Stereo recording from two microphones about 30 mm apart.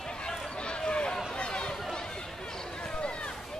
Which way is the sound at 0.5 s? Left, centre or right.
Left.